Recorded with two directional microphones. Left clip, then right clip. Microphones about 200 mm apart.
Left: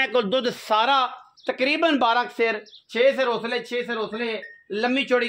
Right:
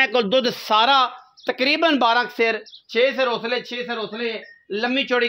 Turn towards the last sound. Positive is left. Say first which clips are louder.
# right 1 dB
turn(degrees=-20)  # may be behind; listen again after turning